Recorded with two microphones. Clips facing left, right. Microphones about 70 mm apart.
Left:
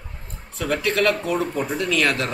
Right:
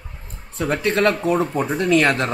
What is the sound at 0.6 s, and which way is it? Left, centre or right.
Speech, right.